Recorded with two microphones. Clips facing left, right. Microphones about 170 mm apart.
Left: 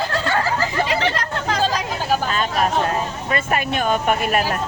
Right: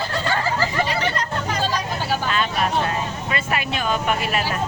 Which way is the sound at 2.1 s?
40° left (ahead or behind).